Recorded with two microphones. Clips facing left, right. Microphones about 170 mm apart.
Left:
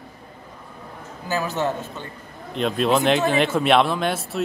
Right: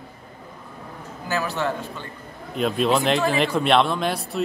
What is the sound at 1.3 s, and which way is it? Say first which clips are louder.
Speech: left 1 dB; 15° left (ahead or behind).